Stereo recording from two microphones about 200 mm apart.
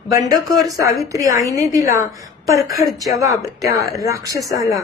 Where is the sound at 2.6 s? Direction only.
Centre (ahead or behind).